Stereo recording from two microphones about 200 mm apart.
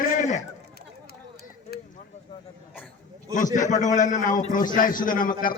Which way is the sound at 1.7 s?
50° left (ahead or behind).